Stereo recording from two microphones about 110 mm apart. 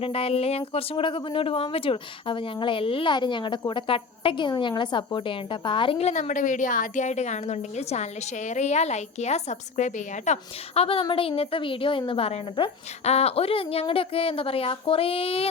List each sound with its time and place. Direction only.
0.0 s a woman's voice: 60° left (ahead or behind)
6.0 s a woman's voice: 85° left
10.8 s a woman's voice: 55° left (ahead or behind)